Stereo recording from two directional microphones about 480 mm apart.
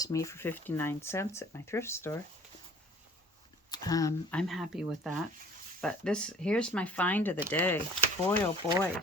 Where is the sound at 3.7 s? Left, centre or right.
Centre.